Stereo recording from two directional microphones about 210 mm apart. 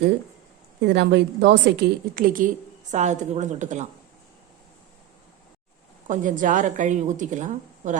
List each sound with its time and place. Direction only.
0.8 s a woman's voice: 55° right (ahead or behind)
2.1 s a woman's voice: 40° right (ahead or behind)
6.1 s a woman's voice: 40° right (ahead or behind)